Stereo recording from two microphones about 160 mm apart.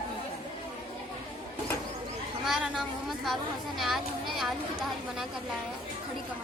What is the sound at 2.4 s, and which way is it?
Speech, centre (ahead or behind).